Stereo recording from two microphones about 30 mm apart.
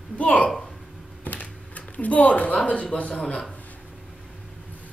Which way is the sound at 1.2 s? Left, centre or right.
Left.